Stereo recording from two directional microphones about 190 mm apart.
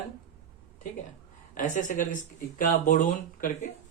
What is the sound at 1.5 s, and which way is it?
Speech, 45° left (ahead or behind).